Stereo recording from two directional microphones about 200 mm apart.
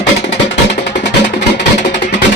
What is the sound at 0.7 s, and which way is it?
Music, 60° left (ahead or behind).